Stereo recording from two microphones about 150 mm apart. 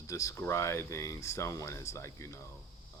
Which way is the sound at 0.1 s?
20° left (ahead or behind).